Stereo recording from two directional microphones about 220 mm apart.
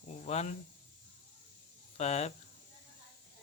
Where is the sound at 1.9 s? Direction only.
30° left (ahead or behind).